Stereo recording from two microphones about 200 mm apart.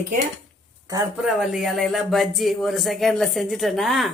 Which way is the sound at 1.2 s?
Centre (ahead or behind).